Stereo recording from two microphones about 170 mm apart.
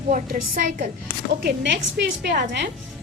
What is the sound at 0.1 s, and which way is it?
Speech, 55° right (ahead or behind).